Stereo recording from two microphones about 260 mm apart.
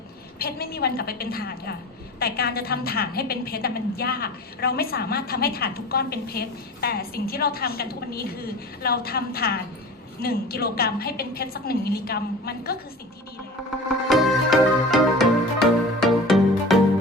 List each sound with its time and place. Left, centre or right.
0.3 s a woman's voice: left
14.1 s music: centre